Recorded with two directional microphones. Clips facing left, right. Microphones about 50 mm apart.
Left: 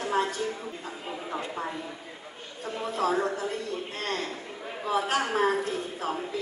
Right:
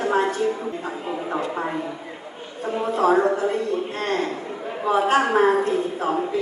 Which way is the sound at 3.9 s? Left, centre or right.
Right.